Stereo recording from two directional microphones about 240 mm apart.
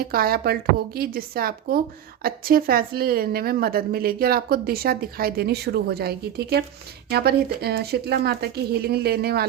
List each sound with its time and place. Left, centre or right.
0.0 s a woman's voice: right